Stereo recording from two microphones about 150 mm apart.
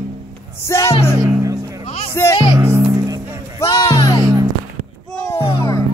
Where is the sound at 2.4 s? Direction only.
25° right (ahead or behind).